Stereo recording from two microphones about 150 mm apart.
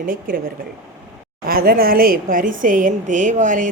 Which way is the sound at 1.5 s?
80° right.